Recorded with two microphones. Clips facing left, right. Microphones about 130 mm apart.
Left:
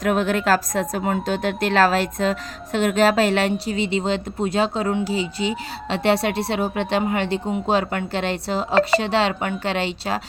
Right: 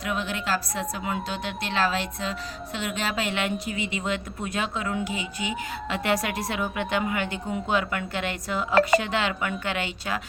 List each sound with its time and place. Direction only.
0.0 s a woman's voice: 45° left (ahead or behind)